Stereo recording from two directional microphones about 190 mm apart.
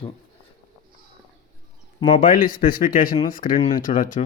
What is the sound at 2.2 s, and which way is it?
Speech, 45° left (ahead or behind).